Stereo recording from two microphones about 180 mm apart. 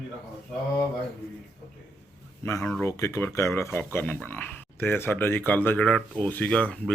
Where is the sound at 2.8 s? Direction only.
15° left (ahead or behind).